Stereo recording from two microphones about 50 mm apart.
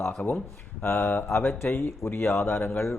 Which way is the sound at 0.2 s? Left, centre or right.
Centre.